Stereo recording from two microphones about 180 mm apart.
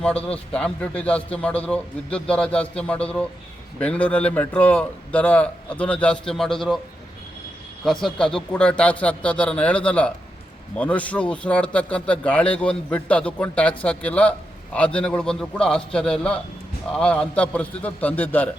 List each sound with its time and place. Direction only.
0.0 s a man's voice: 5° left (ahead or behind)
7.9 s a man's voice: 5° left (ahead or behind)